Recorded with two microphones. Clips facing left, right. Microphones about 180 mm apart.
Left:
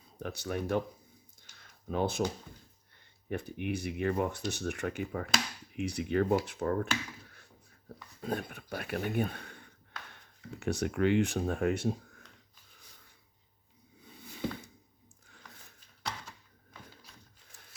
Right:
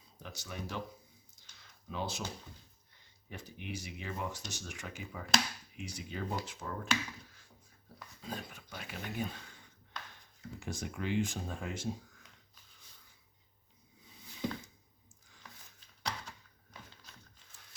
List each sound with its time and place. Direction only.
0.2 s speech: 55° left (ahead or behind)
1.4 s a sound: 55° left (ahead or behind)
3.2 s speech: 55° left (ahead or behind)
8.2 s speech: 60° left (ahead or behind)
10.6 s speech: 70° left (ahead or behind)
14.0 s a sound: 60° left (ahead or behind)